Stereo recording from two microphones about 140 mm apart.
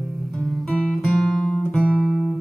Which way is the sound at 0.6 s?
5° left (ahead or behind).